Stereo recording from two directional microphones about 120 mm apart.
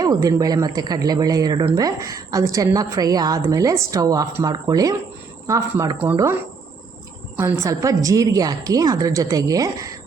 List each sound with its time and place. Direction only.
0.0 s a woman's voice: 30° right (ahead or behind)
7.3 s a woman's voice: 25° right (ahead or behind)